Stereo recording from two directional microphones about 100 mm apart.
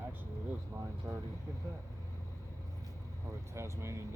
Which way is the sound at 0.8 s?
25° right (ahead or behind).